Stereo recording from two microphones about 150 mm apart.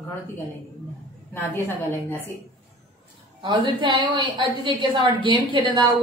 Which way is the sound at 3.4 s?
35° right (ahead or behind).